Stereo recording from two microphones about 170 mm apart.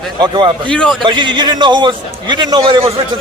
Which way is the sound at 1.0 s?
25° right (ahead or behind).